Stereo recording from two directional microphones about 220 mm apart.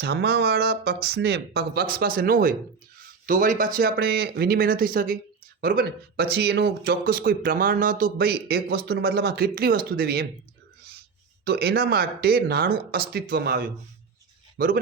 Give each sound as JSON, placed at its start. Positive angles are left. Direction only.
{"t": 0.0, "sound": "speech", "side_deg": -50}
{"t": 11.4, "sound": "a man's voice", "side_deg": -45}